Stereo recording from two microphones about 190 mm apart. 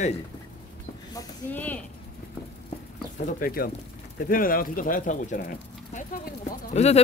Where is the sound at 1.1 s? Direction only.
10° left (ahead or behind).